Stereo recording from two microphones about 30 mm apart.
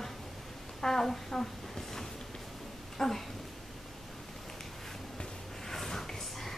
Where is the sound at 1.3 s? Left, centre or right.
Centre.